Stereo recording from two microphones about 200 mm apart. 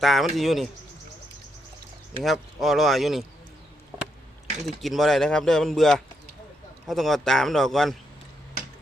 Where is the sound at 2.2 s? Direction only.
Centre (ahead or behind).